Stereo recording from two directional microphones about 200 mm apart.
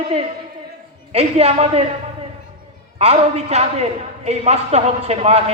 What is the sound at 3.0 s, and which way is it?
A man's voice, 30° right (ahead or behind).